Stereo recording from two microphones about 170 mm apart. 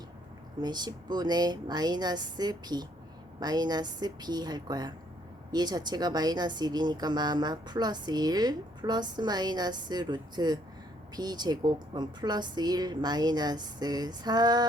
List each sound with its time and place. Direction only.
0.6 s speech: 25° right (ahead or behind)